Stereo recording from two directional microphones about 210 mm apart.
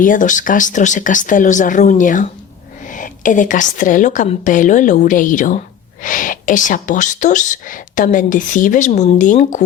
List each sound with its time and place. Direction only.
0.0 s a woman's voice: 40° left (ahead or behind)